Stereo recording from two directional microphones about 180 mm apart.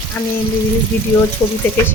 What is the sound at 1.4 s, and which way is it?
Speech, 20° left (ahead or behind).